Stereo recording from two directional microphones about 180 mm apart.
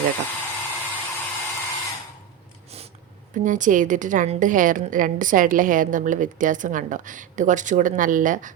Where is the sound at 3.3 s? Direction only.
45° right (ahead or behind).